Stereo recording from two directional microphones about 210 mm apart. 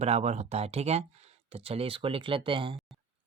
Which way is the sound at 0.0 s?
30° right (ahead or behind).